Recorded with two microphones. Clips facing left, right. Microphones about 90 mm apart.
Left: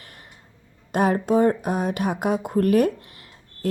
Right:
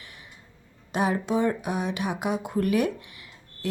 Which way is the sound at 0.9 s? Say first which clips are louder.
Left 5 dB; 50° left (ahead or behind).